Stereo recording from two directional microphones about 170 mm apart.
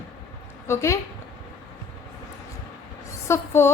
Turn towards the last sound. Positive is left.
turn(degrees=15)  # may be behind; listen again after turning